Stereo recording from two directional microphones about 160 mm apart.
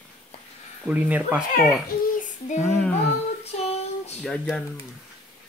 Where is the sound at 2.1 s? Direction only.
50° left (ahead or behind).